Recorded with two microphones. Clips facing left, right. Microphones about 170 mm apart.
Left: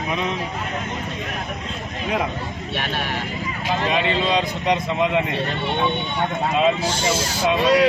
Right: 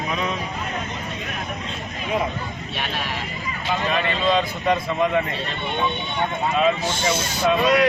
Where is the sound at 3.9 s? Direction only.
20° left (ahead or behind).